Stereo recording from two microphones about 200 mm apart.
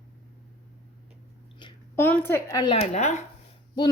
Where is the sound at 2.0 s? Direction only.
10° left (ahead or behind).